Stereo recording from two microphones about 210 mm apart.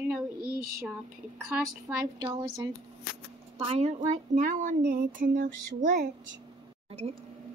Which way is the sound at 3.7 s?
30° right (ahead or behind).